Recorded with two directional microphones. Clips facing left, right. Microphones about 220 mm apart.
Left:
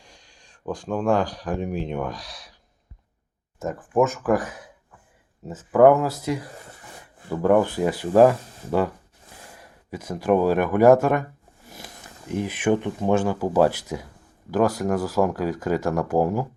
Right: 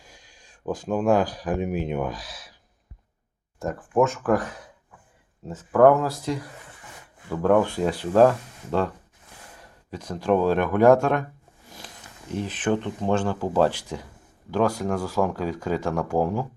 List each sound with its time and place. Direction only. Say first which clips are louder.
0.0 s speech: even; 5° right (ahead or behind)
3.6 s speech: left 1 dB; centre (ahead or behind)
6.6 s a sound: left 3 dB; 40° left (ahead or behind)
7.4 s speech: left 1 dB; 5° left (ahead or behind)
8.4 s speech: left 2 dB; 35° left (ahead or behind)
9.6 s speech: left 2 dB; 10° left (ahead or behind)
12.3 s speech: left 3 dB; 10° left (ahead or behind)